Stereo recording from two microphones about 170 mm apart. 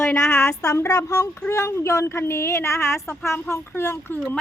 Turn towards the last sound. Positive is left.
turn(degrees=10)  # may be behind; listen again after turning